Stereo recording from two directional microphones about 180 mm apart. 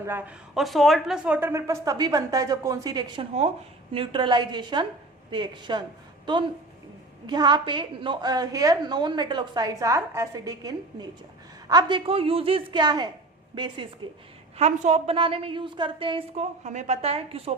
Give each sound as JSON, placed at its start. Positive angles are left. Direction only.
{"t": 0.0, "sound": "a woman's voice", "side_deg": -10}
{"t": 7.3, "sound": "a woman's voice", "side_deg": -25}
{"t": 14.6, "sound": "a woman's voice", "side_deg": -35}